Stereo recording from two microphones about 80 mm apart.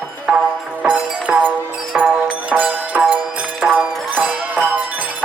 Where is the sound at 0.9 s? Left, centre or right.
Centre.